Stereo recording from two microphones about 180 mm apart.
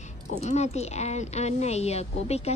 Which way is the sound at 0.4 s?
40° left (ahead or behind).